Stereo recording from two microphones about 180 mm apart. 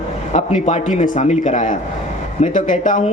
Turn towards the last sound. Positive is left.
turn(degrees=45)  # may be behind; listen again after turning